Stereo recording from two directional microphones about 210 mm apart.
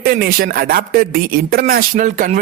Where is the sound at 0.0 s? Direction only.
45° right (ahead or behind).